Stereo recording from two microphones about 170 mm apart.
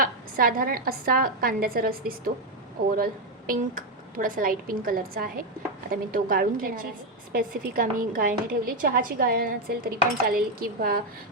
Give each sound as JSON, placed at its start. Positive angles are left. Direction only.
{"t": 0.0, "sound": "a woman's voice", "side_deg": -55}